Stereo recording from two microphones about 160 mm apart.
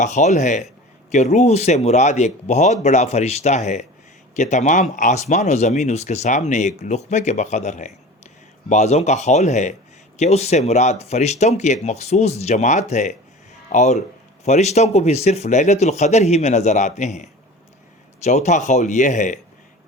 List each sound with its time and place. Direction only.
0.0 s speech: 50° left (ahead or behind)